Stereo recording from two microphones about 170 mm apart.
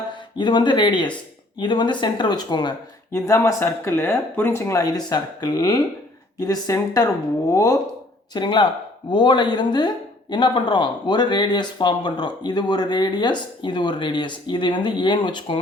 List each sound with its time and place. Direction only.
0.3 s speech: 25° left (ahead or behind)